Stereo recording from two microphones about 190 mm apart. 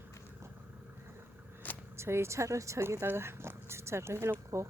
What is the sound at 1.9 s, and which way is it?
Speech, 15° right (ahead or behind).